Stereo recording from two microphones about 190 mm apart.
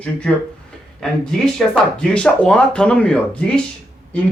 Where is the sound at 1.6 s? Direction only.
5° left (ahead or behind).